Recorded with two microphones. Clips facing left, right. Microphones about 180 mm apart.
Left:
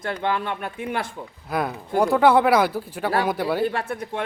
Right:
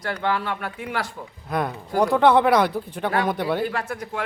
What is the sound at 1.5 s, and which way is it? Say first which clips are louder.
Speech: left 1 dB; 5° left (ahead or behind).